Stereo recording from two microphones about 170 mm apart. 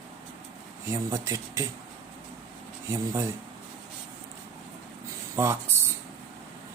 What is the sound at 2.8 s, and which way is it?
Speech, 20° right (ahead or behind).